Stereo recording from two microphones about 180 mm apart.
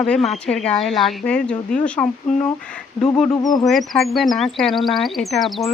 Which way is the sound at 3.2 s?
20° left (ahead or behind).